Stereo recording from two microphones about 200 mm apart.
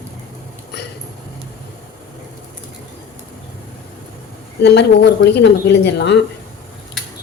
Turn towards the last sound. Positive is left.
turn(degrees=60)  # may be behind; listen again after turning